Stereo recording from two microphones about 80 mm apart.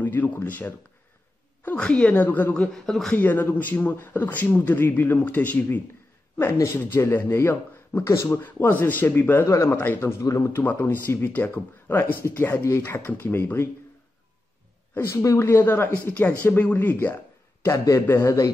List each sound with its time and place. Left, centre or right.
0.0 s a man's voice: left
3.2 s a man's voice: left
6.3 s a man's voice: left
10.2 s speech: left
10.5 s a man's voice: left
15.3 s a man's voice: left
17.6 s a man's voice: left